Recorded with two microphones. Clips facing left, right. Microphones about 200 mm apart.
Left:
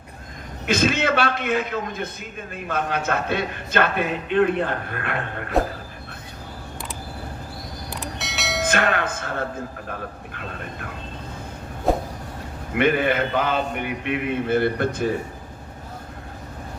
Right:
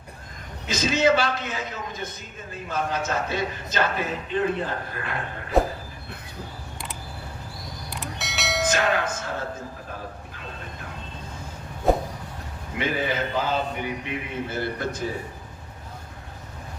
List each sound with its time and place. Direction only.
0.7 s a man's voice: 55° left (ahead or behind)
5.6 s a sound: centre (ahead or behind)
7.9 s train: centre (ahead or behind)
8.6 s speech: 60° left (ahead or behind)
11.9 s a sound: centre (ahead or behind)
12.7 s a man's voice: 60° left (ahead or behind)